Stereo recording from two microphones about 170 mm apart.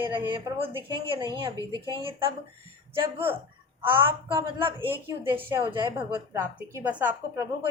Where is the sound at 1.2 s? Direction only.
20° right (ahead or behind).